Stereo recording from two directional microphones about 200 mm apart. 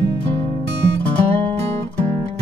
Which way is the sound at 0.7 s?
60° right (ahead or behind).